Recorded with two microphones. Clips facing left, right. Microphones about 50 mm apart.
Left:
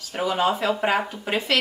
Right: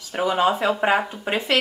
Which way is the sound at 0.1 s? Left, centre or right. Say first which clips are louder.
Right 2 dB; centre.